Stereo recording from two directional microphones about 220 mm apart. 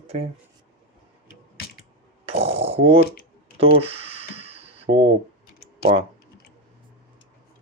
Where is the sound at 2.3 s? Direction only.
25° right (ahead or behind).